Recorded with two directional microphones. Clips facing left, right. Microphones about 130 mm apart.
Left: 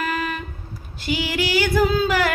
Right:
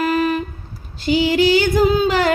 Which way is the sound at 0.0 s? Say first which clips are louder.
Right 8 dB; 35° right (ahead or behind).